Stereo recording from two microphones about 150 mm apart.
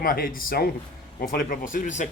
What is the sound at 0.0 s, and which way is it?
Speech, 70° left (ahead or behind).